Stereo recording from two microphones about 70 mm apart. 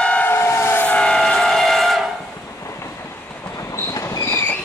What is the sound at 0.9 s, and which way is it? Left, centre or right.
Vehicle, centre.